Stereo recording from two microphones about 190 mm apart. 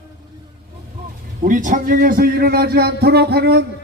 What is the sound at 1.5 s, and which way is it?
A man's voice, 45° right (ahead or behind).